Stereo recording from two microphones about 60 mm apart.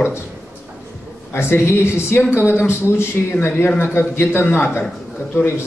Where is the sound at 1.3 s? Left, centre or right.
Left.